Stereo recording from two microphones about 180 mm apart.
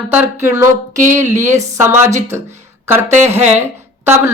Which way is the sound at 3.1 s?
10° right (ahead or behind).